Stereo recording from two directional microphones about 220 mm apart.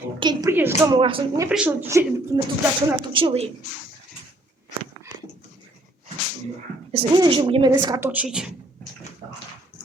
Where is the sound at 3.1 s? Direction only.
25° right (ahead or behind).